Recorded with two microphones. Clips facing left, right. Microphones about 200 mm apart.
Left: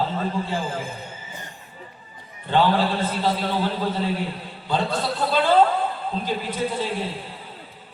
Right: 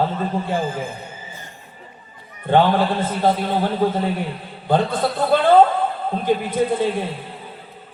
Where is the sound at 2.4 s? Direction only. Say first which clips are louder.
Right 4 dB; 50° right (ahead or behind).